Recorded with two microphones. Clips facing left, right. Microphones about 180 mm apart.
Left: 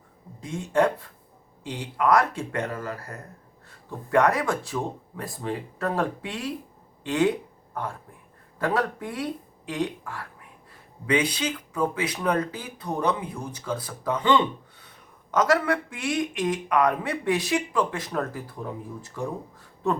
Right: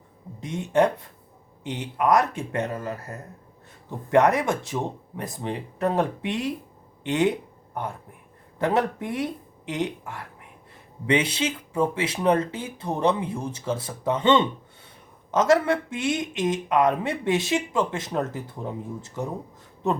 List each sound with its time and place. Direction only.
0.3 s speech: 20° right (ahead or behind)